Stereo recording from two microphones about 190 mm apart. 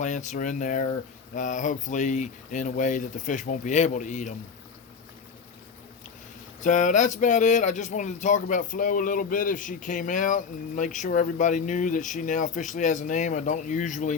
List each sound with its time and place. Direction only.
0.0 s speech: 40° left (ahead or behind)
6.6 s speech: 40° left (ahead or behind)